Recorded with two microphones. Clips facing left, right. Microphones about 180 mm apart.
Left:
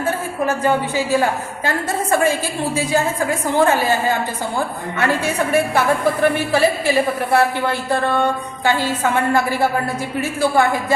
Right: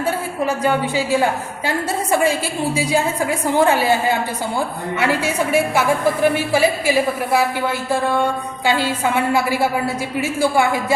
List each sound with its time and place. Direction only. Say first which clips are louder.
0.4 s a woman's voice: left 1 dB; 15° right (ahead or behind)
4.9 s a woman's voice: even; 10° right (ahead or behind)